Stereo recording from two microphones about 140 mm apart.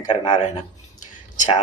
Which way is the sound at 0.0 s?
60° left (ahead or behind).